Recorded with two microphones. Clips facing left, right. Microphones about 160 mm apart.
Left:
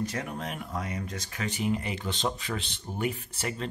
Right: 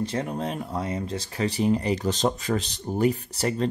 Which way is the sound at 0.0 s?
30° right (ahead or behind).